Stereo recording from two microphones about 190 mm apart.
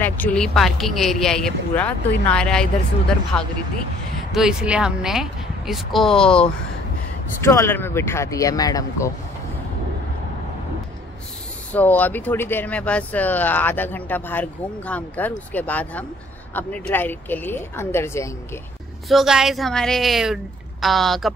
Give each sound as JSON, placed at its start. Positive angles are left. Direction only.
{"t": 0.0, "sound": "speech", "side_deg": 10}
{"t": 4.3, "sound": "speech", "side_deg": 0}
{"t": 11.7, "sound": "speech", "side_deg": 10}
{"t": 19.0, "sound": "speech", "side_deg": 0}